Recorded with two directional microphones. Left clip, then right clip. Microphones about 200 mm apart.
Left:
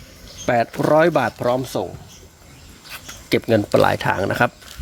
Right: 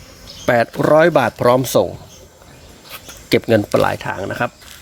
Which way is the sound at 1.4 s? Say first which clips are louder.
Right 7 dB; 35° right (ahead or behind).